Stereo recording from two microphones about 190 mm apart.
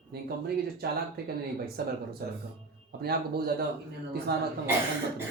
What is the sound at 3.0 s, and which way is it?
Speech, 55° right (ahead or behind).